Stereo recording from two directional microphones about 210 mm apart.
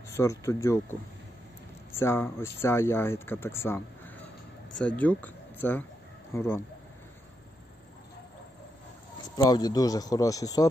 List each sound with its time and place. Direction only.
0.1 s speech: 15° left (ahead or behind)
9.4 s speech: 20° left (ahead or behind)